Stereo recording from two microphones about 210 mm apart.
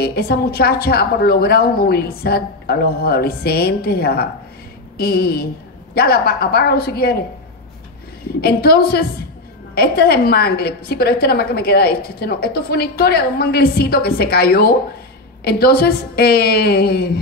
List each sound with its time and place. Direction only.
0.0 s a woman's voice: 50° left (ahead or behind)
8.4 s a woman's voice: 50° left (ahead or behind)